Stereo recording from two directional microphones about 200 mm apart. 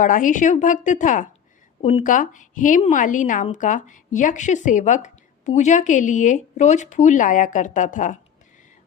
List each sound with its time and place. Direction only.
0.0 s a woman's voice: 40° left (ahead or behind)